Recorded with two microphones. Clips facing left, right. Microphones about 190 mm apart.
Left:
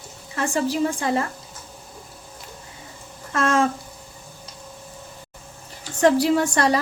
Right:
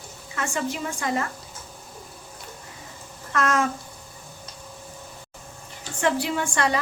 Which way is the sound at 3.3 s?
30° left (ahead or behind).